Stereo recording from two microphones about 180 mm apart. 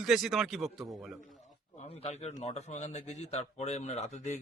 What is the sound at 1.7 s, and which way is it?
A man's voice, 35° left (ahead or behind).